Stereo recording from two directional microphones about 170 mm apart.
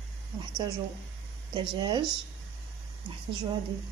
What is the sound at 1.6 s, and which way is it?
Speech, 25° right (ahead or behind).